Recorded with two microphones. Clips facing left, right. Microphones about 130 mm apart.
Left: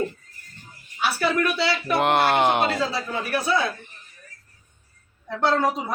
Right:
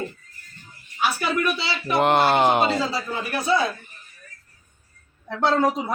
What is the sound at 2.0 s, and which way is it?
Speech, centre (ahead or behind).